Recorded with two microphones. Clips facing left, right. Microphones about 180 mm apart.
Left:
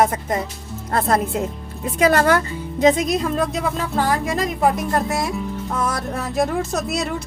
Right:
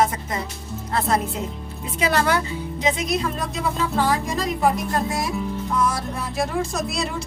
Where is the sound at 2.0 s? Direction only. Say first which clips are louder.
Left 5 dB; 50° left (ahead or behind).